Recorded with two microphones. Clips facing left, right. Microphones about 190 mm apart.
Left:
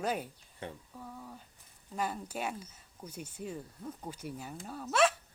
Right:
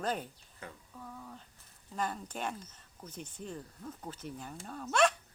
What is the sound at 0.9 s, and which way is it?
Speech, 10° left (ahead or behind).